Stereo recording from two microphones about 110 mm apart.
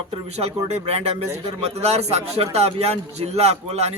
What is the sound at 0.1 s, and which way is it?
A man's voice, 75° right (ahead or behind).